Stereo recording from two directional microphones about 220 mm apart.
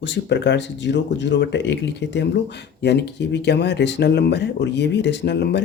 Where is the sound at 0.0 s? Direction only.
55° left (ahead or behind).